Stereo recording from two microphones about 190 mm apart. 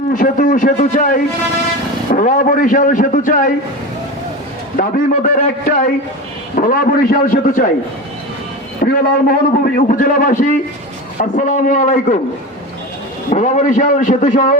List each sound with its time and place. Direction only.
0.1 s a man's voice: 45° left (ahead or behind)
4.8 s a man's voice: 45° left (ahead or behind)
8.8 s a man's voice: 50° left (ahead or behind)
13.3 s a man's voice: 40° left (ahead or behind)